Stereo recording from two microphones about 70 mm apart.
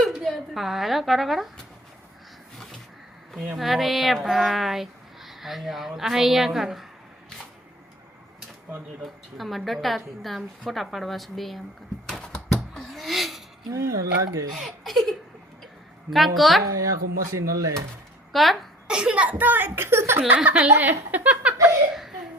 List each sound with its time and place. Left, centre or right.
0.2 s speech: centre
3.6 s speech: centre
9.4 s speech: centre
12.0 s typing: centre
12.5 s a sound: centre
13.7 s speech: right
14.5 s speech: centre
16.6 s speech: right
18.3 s speech: centre
18.9 s a child's voice: centre; by 20.2 s right
20.2 s a child's voice: right